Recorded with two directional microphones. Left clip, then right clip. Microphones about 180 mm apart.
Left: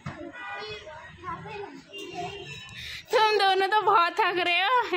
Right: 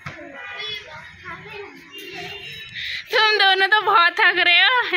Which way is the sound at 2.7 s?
10° left (ahead or behind).